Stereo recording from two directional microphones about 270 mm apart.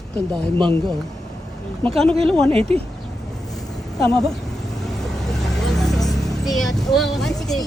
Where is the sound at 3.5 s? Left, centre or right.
Centre.